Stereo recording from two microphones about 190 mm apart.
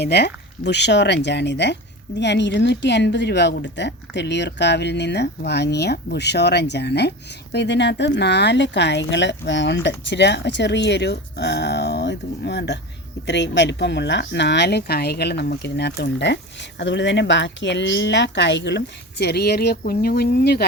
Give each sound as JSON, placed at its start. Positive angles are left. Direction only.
{"t": 0.0, "sound": "speech", "side_deg": 60}